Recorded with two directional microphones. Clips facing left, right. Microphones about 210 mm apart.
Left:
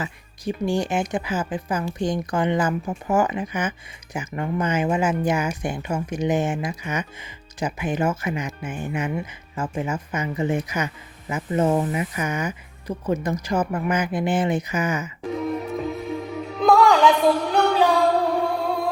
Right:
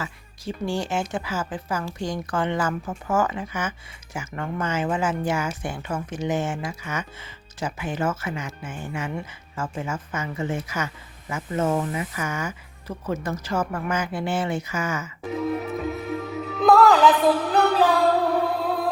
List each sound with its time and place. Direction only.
0.0 s speech: 15° left (ahead or behind)
15.4 s music: centre (ahead or behind)
16.6 s a sound: centre (ahead or behind)